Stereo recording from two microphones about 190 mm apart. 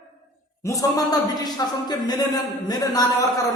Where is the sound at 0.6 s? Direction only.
15° left (ahead or behind).